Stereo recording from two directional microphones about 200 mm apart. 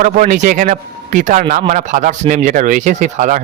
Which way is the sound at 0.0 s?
40° right (ahead or behind).